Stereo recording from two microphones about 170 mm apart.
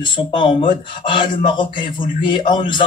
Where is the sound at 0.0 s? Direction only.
30° left (ahead or behind).